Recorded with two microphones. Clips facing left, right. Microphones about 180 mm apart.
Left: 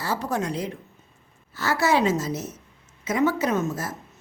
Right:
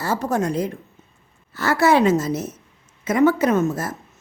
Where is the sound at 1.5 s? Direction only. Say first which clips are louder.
Right 5 dB; 55° right (ahead or behind).